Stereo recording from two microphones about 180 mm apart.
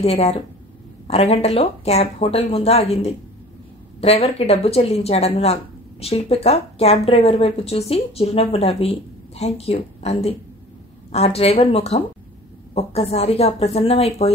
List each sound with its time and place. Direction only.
0.0 s speech: 35° left (ahead or behind)